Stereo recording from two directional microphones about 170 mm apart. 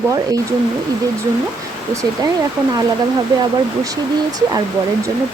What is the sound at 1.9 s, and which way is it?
Speech, 20° right (ahead or behind).